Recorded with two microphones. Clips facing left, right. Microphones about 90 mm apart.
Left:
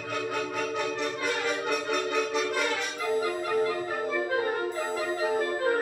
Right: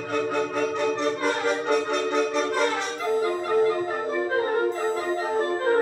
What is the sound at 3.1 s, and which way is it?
Music, 35° right (ahead or behind).